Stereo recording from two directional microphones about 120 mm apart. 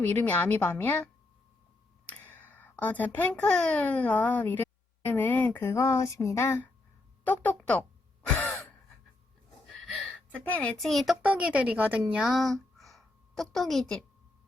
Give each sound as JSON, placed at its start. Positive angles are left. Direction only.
{"t": 0.0, "sound": "a woman's voice", "side_deg": 15}
{"t": 2.0, "sound": "a child's voice", "side_deg": 15}
{"t": 5.0, "sound": "a sound", "side_deg": 15}
{"t": 10.5, "sound": "speech", "side_deg": 5}
{"t": 11.3, "sound": "a woman's voice", "side_deg": -10}